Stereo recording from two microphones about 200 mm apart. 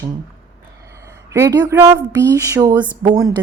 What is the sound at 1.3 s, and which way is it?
Speech, 15° right (ahead or behind).